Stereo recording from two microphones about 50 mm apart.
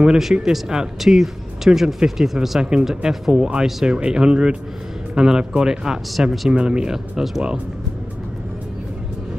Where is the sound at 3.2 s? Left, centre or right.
Centre.